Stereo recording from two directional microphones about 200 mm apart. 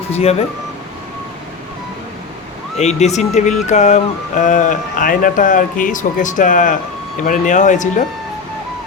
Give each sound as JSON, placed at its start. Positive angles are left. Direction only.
{"t": 0.1, "sound": "speech", "side_deg": 30}
{"t": 2.7, "sound": "speech", "side_deg": 35}